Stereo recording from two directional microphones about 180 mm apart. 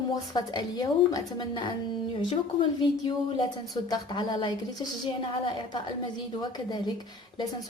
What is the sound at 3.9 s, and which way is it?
A woman's voice, 25° left (ahead or behind).